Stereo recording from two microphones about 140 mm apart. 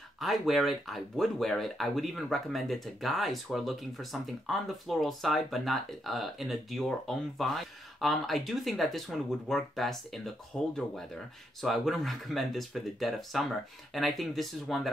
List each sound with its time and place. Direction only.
0.2 s speech: centre (ahead or behind)